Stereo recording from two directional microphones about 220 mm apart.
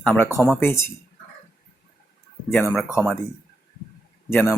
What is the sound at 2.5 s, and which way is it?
Speech, 5° left (ahead or behind).